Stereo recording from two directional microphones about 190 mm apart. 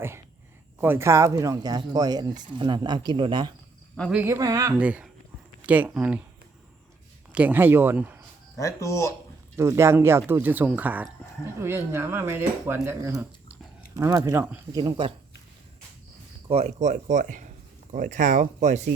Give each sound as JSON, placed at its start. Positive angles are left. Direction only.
{"t": 0.8, "sound": "speech", "side_deg": -10}
{"t": 4.1, "sound": "speech", "side_deg": -10}
{"t": 7.3, "sound": "speech", "side_deg": -10}
{"t": 8.5, "sound": "speech", "side_deg": 15}
{"t": 9.6, "sound": "speech", "side_deg": -15}
{"t": 16.5, "sound": "speech", "side_deg": -35}